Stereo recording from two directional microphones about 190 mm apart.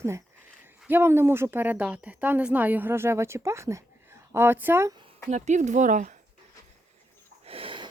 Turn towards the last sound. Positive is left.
turn(degrees=-30)  # may be behind; listen again after turning